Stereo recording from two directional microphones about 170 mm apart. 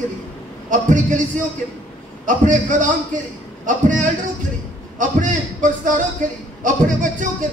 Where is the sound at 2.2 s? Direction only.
50° right (ahead or behind).